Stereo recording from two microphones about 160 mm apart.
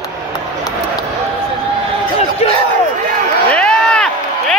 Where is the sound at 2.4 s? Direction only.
40° left (ahead or behind).